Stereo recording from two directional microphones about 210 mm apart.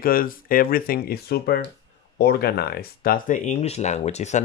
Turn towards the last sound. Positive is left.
turn(degrees=35)  # may be behind; listen again after turning